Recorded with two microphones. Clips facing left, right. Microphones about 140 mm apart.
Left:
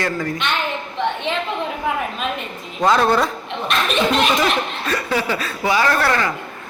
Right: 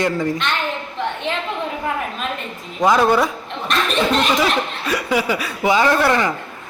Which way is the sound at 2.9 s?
10° right (ahead or behind).